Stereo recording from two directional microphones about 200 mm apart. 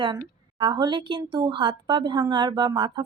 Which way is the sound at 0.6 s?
20° right (ahead or behind).